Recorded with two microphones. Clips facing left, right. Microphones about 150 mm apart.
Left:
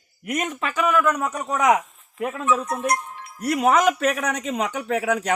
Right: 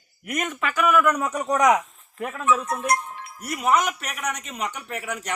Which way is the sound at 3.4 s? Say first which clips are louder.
Left 4 dB; 75° left (ahead or behind).